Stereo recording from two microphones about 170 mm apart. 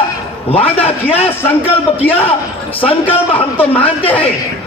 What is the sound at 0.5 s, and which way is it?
Speech, 35° left (ahead or behind).